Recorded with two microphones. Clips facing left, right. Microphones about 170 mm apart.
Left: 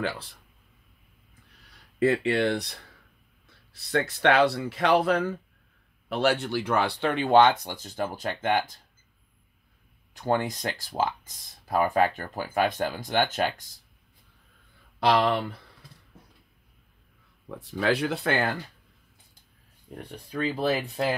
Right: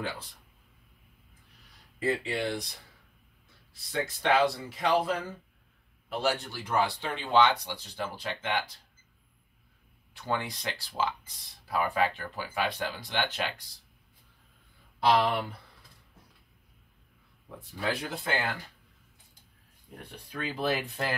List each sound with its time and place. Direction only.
2.0 s speech: 70° left (ahead or behind); by 8.7 s 45° left (ahead or behind)
10.1 s speech: 45° left (ahead or behind)
15.0 s speech: 75° left (ahead or behind)
17.6 s speech: 90° left; by 18.6 s 55° left (ahead or behind)
20.0 s speech: 35° left (ahead or behind)